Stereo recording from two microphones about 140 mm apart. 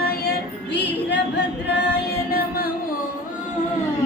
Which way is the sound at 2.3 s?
90° left.